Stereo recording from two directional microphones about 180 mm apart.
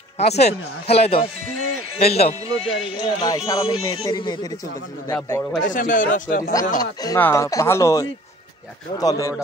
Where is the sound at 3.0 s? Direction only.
25° left (ahead or behind).